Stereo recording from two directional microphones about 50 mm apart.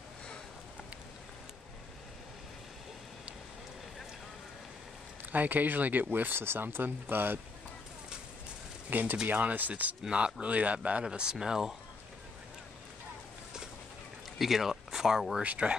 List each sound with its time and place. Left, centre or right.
5.3 s speech: right
8.9 s speech: right
10.0 s speech: right
14.4 s speech: centre
15.4 s speech: right